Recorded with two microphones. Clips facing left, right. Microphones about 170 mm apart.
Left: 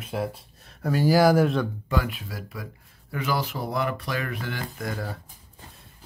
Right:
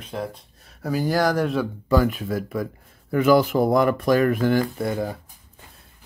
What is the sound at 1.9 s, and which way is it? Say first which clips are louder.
Speech: right 8 dB; 45° right (ahead or behind).